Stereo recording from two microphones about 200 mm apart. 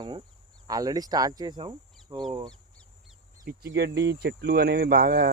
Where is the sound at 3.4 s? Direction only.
55° right (ahead or behind).